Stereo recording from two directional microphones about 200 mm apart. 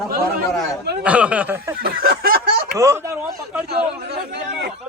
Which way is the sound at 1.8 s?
50° right (ahead or behind).